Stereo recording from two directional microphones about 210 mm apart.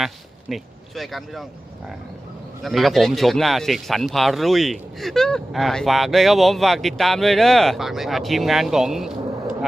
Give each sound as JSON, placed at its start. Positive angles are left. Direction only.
{"t": 0.0, "sound": "speech", "side_deg": 0}
{"t": 2.6, "sound": "speech", "side_deg": 0}